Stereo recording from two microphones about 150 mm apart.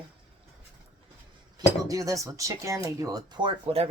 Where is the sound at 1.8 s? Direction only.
25° right (ahead or behind).